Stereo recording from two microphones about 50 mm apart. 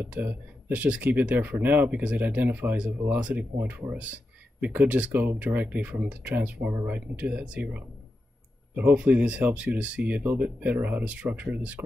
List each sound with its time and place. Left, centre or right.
0.0 s speech: right
1.9 s speech: right
3.5 s speech: right
8.7 s speech: right
9.0 s speech: right